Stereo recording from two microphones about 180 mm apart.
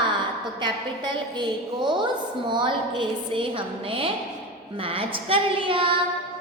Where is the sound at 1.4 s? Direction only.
25° right (ahead or behind).